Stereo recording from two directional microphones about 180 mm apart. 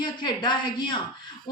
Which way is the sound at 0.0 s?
25° left (ahead or behind).